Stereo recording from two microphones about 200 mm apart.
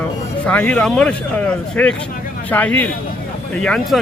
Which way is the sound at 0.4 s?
5° left (ahead or behind).